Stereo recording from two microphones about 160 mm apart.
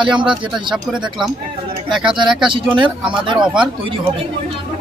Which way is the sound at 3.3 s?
5° right (ahead or behind).